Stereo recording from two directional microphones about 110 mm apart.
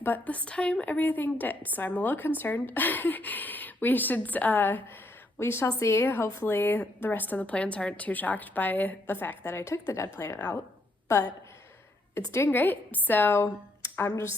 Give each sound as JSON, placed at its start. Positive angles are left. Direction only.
{"t": 0.0, "sound": "a woman's voice", "side_deg": 15}
{"t": 9.6, "sound": "a woman's voice", "side_deg": 30}
{"t": 12.1, "sound": "a woman's voice", "side_deg": 25}